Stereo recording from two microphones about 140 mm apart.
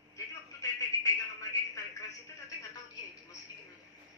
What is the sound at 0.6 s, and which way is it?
Telephone, 25° left (ahead or behind).